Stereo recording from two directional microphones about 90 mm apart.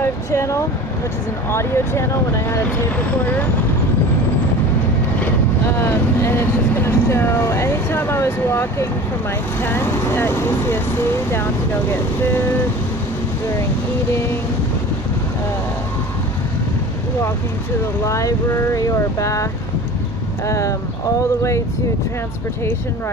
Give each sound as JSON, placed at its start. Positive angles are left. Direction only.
{"t": 0.0, "sound": "a sound", "side_deg": 30}
{"t": 1.5, "sound": "speech", "side_deg": 30}
{"t": 5.7, "sound": "speech", "side_deg": 25}
{"t": 18.0, "sound": "speech", "side_deg": 35}
{"t": 20.4, "sound": "speech", "side_deg": 35}